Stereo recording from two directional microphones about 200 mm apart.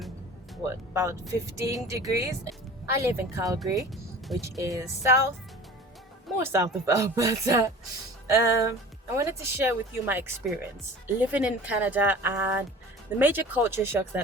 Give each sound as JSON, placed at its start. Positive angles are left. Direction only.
{"t": 0.6, "sound": "speech", "side_deg": -15}
{"t": 6.4, "sound": "speech", "side_deg": -15}